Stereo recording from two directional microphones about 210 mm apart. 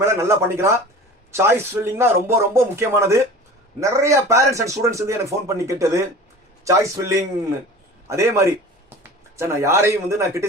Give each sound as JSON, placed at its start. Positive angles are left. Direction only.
{"t": 0.0, "sound": "a man's voice", "side_deg": -15}